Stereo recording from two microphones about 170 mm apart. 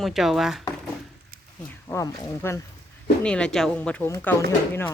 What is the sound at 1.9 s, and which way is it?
Speech, 20° left (ahead or behind).